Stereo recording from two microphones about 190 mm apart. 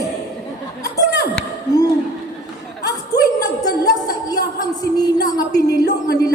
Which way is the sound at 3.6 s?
20° left (ahead or behind).